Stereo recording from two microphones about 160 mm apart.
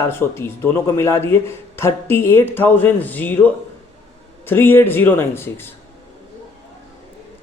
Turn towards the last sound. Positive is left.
turn(degrees=15)  # may be behind; listen again after turning